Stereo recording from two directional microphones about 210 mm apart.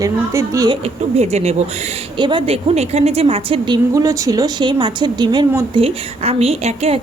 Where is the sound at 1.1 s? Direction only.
30° right (ahead or behind).